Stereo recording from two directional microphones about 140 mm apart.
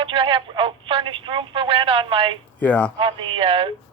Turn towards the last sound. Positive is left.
turn(degrees=-40)  # may be behind; listen again after turning